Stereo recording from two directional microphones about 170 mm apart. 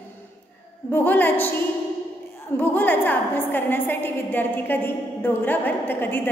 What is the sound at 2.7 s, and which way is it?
A woman's voice, 10° left (ahead or behind).